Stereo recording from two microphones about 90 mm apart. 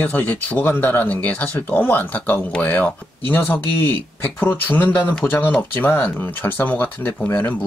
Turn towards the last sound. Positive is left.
turn(degrees=20)  # may be behind; listen again after turning